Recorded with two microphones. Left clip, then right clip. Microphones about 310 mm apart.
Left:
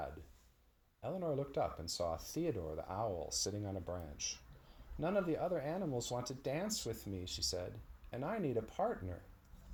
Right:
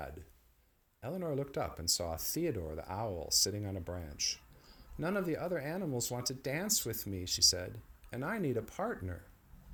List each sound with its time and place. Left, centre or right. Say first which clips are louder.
1.0 s speech: right 1 dB; right